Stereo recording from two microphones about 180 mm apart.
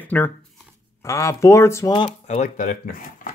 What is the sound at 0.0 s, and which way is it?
Speech, 10° left (ahead or behind).